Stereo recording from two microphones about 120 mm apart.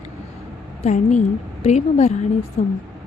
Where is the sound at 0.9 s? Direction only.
90° left.